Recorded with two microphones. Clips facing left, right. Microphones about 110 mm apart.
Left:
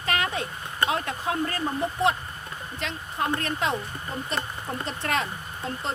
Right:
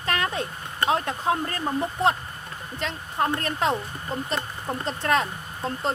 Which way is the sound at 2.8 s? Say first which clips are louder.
Right 3 dB; 40° right (ahead or behind).